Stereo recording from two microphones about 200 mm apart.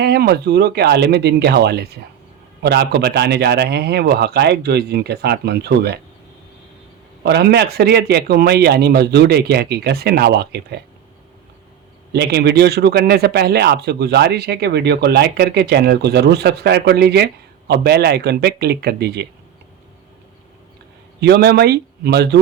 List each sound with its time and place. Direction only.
0.0 s a man's voice: 55° right (ahead or behind)
7.3 s a man's voice: 55° right (ahead or behind)
12.1 s a man's voice: 55° right (ahead or behind)
21.2 s a man's voice: 55° right (ahead or behind)